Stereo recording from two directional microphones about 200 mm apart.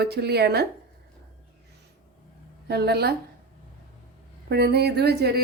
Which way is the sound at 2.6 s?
55° right (ahead or behind).